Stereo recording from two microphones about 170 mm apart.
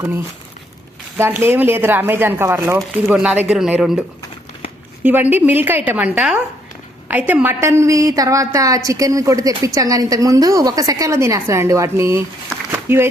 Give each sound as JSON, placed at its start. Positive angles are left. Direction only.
{"t": 1.2, "sound": "speech", "side_deg": -15}
{"t": 5.0, "sound": "a woman's voice", "side_deg": -10}